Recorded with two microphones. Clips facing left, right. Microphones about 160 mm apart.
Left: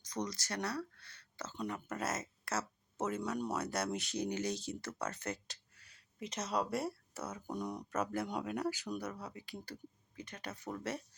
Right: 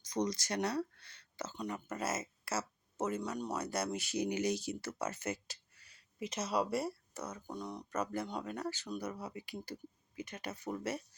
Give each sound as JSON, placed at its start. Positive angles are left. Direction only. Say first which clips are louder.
{"t": 0.1, "sound": "speech", "louder": "right 5 dB", "side_deg": -15}
{"t": 1.5, "sound": "speech", "louder": "left 1 dB", "side_deg": 0}
{"t": 9.0, "sound": "speech", "louder": "right 2 dB", "side_deg": -5}